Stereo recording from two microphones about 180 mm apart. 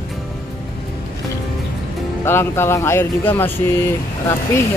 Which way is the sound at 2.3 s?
15° left (ahead or behind).